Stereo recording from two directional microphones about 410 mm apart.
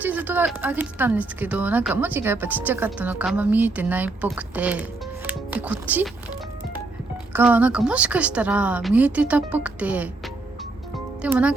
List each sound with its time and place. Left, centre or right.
0.0 s speech: centre
7.3 s speech: centre
11.2 s speech: centre